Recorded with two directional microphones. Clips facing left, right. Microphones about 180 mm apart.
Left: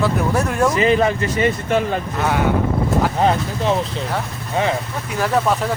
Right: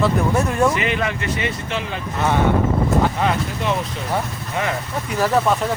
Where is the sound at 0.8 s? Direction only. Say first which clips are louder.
Left 7 dB; 35° left (ahead or behind).